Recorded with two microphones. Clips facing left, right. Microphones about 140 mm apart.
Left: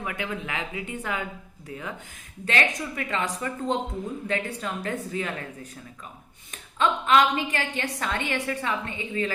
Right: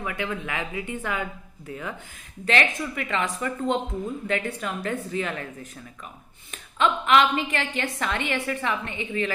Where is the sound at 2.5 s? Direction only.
35° left (ahead or behind).